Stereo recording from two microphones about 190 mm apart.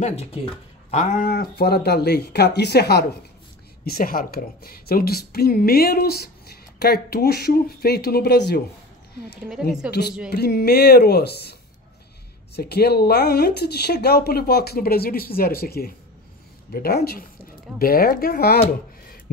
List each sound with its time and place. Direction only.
0.0 s speech: 35° left (ahead or behind)
0.9 s a woman's voice: 45° left (ahead or behind)
10.3 s a woman's voice: 55° left (ahead or behind)
12.5 s a woman's voice: 60° left (ahead or behind)